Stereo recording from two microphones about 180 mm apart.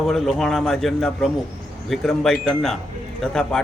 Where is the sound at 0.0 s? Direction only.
Centre (ahead or behind).